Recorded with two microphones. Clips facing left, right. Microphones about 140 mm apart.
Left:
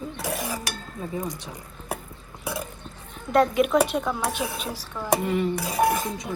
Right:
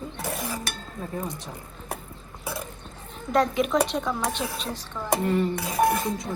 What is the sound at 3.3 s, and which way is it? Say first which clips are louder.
A woman's voice: left 3 dB; centre (ahead or behind).